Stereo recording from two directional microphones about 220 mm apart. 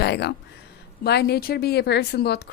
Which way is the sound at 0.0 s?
50° left (ahead or behind).